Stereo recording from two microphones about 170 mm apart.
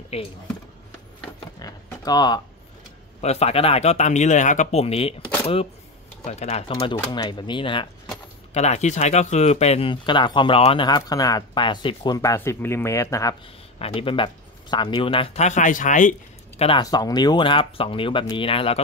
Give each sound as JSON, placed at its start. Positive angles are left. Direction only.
{"t": 0.1, "sound": "speech", "side_deg": 35}
{"t": 1.6, "sound": "a sound", "side_deg": 20}
{"t": 3.2, "sound": "speech", "side_deg": 40}
{"t": 6.2, "sound": "speech", "side_deg": 40}
{"t": 8.5, "sound": "speech", "side_deg": 40}
{"t": 13.7, "sound": "speech", "side_deg": 35}
{"t": 16.6, "sound": "speech", "side_deg": 25}